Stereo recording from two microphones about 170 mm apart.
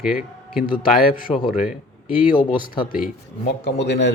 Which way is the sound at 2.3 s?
30° left (ahead or behind).